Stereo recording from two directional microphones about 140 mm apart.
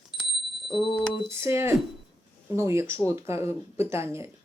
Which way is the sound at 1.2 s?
20° right (ahead or behind).